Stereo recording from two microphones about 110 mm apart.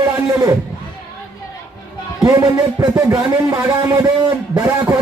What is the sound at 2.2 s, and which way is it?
Speech, 35° right (ahead or behind).